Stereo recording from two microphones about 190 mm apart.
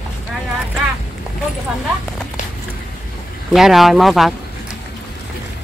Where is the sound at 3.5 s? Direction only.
Centre (ahead or behind).